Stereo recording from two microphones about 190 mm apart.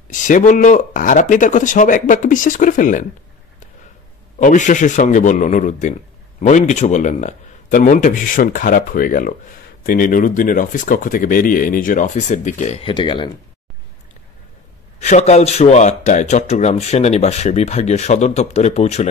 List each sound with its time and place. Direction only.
0.1 s speech: 40° left (ahead or behind)
4.4 s a man's voice: 40° left (ahead or behind); by 13.3 s 25° left (ahead or behind)
15.0 s a man's voice: 35° left (ahead or behind)